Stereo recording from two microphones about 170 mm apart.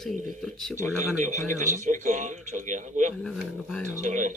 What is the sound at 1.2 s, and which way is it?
Speech, 45° right (ahead or behind).